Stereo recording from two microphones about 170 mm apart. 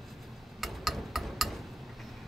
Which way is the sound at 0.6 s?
Centre (ahead or behind).